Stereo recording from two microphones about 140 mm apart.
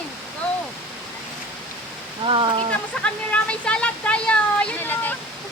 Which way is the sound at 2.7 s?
10° left (ahead or behind).